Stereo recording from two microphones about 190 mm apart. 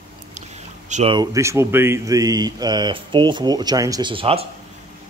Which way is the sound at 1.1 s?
20° right (ahead or behind).